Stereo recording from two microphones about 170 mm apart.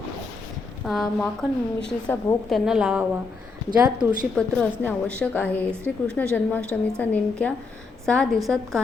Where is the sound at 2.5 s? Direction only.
5° right (ahead or behind).